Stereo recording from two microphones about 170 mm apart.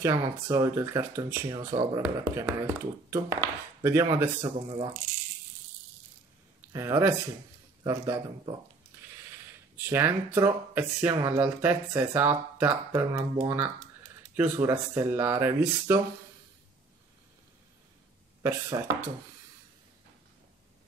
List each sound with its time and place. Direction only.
0.0 s speech: 20° right (ahead or behind)
4.6 s a man's voice: 30° right (ahead or behind)
6.7 s a man's voice: 15° right (ahead or behind)
9.8 s speech: 15° right (ahead or behind)
18.4 s speech: 15° right (ahead or behind)